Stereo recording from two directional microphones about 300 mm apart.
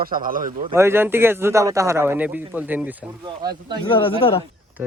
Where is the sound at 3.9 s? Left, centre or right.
Centre.